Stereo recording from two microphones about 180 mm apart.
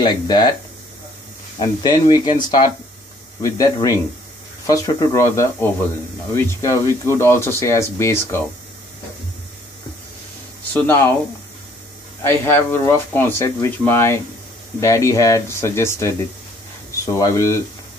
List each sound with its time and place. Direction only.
0.0 s speech: 25° left (ahead or behind)
1.6 s speech: 25° left (ahead or behind)
10.7 s speech: 10° left (ahead or behind)
12.2 s speech: 10° left (ahead or behind)